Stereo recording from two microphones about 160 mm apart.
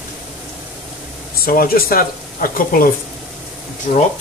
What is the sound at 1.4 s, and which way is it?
Speech, 65° left (ahead or behind).